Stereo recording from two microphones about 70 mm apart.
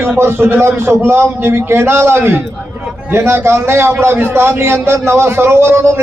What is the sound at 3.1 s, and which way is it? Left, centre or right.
A man's voice, right.